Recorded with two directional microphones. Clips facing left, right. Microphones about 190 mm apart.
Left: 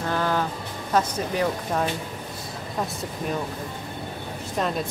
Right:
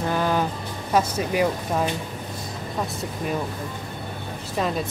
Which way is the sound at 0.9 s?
10° right (ahead or behind).